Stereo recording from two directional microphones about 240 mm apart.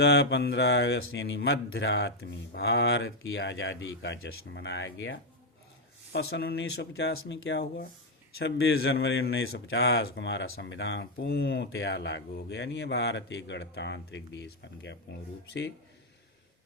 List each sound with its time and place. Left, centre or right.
0.0 s a man's voice: left